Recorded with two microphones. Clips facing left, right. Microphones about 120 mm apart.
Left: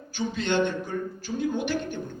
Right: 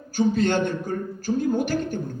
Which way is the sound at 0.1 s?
45° right (ahead or behind).